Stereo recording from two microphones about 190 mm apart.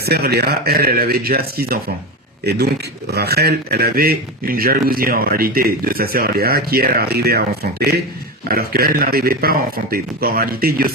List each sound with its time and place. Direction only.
0.0 s a man's voice: 55° right (ahead or behind)